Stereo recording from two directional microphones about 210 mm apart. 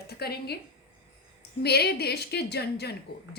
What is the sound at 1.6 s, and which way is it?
Speech, 50° left (ahead or behind).